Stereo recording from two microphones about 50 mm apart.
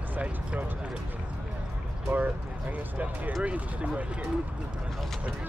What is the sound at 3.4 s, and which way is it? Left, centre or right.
Speech, right.